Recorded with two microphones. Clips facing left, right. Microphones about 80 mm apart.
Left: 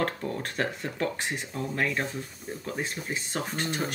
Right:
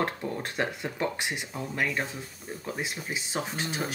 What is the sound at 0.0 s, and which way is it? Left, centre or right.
Speech, centre.